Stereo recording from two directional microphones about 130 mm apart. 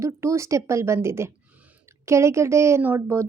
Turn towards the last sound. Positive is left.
turn(degrees=-20)  # may be behind; listen again after turning